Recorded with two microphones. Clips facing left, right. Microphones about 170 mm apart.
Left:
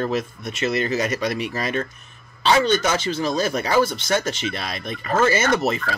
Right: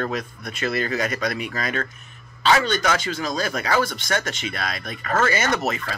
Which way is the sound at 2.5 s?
25° left (ahead or behind).